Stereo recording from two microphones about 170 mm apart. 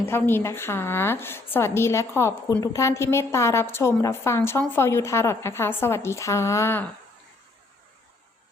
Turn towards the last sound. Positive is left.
turn(degrees=15)  # may be behind; listen again after turning